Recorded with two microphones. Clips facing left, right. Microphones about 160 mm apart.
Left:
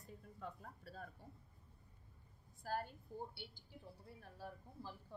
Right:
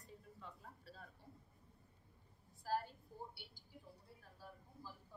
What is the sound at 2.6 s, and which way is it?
Speech, 55° left (ahead or behind).